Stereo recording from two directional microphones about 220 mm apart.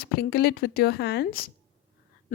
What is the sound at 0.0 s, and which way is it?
A woman's voice, 45° left (ahead or behind).